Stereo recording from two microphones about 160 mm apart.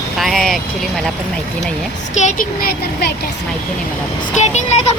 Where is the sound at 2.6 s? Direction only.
80° left.